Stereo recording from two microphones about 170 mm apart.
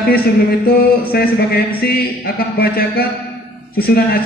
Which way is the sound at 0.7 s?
65° left (ahead or behind).